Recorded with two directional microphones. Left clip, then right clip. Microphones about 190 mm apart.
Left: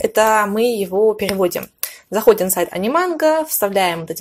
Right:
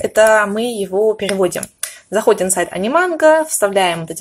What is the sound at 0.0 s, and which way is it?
Speech, 30° left (ahead or behind).